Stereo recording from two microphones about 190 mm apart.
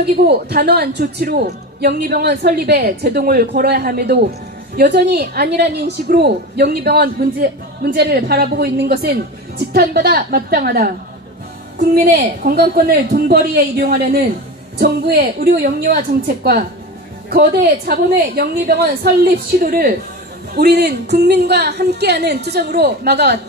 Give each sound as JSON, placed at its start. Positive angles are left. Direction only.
{"t": 0.0, "sound": "a woman's voice", "side_deg": -55}
{"t": 11.9, "sound": "a man's voice", "side_deg": -50}